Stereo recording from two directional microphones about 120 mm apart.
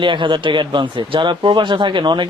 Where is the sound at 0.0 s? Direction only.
45° right (ahead or behind).